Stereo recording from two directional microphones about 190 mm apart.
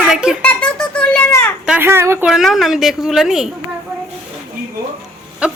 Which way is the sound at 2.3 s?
Centre (ahead or behind).